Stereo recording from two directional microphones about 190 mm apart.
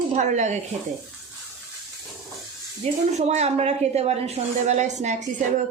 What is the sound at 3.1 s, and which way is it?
A woman's voice, 35° right (ahead or behind).